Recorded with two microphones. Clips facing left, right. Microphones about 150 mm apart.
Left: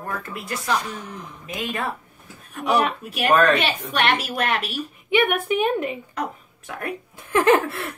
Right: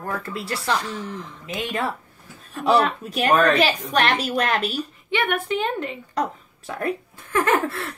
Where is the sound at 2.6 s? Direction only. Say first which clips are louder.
Right 2 dB; 15° left (ahead or behind).